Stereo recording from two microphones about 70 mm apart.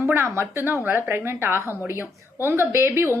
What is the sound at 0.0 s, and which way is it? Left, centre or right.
A woman's voice, right.